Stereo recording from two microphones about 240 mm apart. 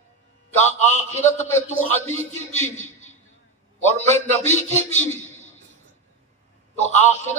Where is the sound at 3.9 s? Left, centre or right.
Right.